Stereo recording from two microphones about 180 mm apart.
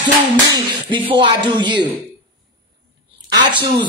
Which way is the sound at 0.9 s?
25° right (ahead or behind).